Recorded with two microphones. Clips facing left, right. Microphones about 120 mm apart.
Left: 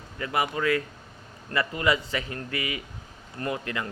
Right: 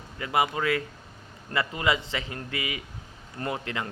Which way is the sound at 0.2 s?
20° right (ahead or behind).